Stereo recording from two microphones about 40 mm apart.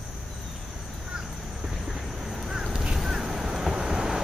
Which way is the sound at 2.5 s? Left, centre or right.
Centre.